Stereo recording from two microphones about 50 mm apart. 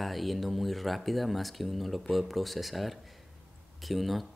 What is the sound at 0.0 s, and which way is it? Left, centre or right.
Speech, centre.